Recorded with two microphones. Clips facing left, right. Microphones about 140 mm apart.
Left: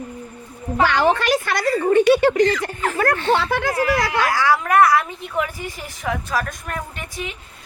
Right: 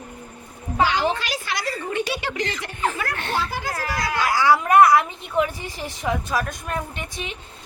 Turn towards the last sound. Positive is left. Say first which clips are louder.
# left 2 dB
turn(degrees=-25)  # may be behind; listen again after turning